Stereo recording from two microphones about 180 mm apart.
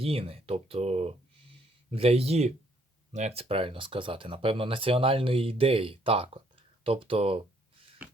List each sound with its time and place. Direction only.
0.0 s speech: 30° right (ahead or behind)